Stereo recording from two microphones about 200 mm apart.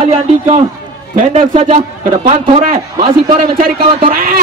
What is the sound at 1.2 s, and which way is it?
A man's voice, 35° right (ahead or behind).